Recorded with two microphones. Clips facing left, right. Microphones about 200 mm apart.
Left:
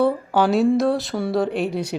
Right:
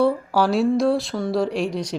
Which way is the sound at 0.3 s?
Centre (ahead or behind).